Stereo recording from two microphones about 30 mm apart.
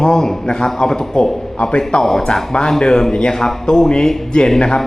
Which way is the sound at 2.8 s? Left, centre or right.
Left.